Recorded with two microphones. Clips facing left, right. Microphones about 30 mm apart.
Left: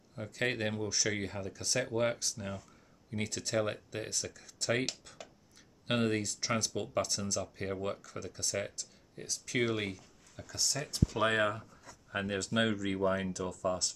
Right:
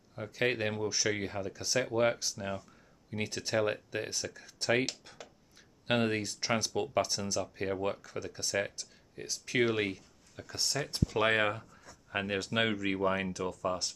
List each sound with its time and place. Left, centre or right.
0.1 s speech: centre